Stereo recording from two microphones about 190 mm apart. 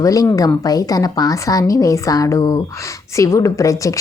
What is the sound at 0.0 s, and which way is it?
A woman's voice, 15° left (ahead or behind).